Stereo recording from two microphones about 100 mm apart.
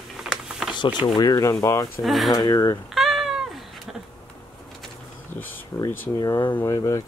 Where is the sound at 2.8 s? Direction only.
Centre (ahead or behind).